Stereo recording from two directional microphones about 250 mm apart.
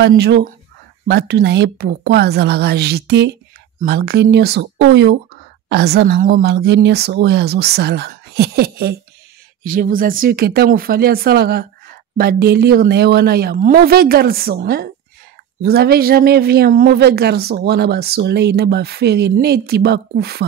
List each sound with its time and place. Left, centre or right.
0.0 s speech: right